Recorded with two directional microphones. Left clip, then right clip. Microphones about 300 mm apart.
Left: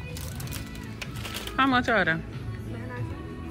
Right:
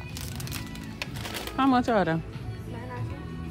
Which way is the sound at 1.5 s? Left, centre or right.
Centre.